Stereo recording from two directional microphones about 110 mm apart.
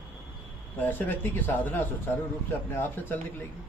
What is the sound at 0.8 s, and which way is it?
A man's voice, 15° left (ahead or behind).